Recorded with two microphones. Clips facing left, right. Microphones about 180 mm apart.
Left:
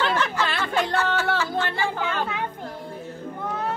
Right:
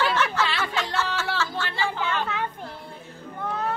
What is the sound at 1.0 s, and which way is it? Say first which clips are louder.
Music: left 5 dB; 50° left (ahead or behind).